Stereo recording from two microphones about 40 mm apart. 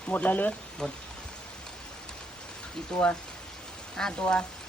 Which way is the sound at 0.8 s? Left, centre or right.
Centre.